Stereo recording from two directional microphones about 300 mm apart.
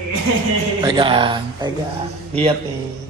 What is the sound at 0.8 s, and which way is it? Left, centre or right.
Speech, centre.